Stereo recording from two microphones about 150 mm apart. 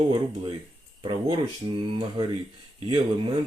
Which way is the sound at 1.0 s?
30° right (ahead or behind).